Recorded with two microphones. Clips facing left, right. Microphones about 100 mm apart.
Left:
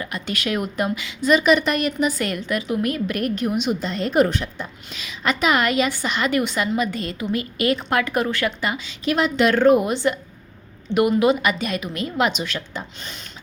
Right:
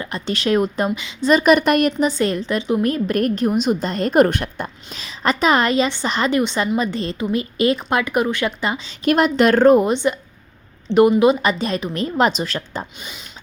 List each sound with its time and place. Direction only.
0.0 s speech: 30° right (ahead or behind)
1.3 s a woman's voice: 45° right (ahead or behind)
2.0 s a woman's voice: 30° right (ahead or behind); by 4.7 s 55° right (ahead or behind)
4.9 s a woman's voice: 35° right (ahead or behind)
9.0 s a woman's voice: 50° right (ahead or behind)
9.9 s a woman's voice: 20° right (ahead or behind)
13.0 s speech: 10° right (ahead or behind)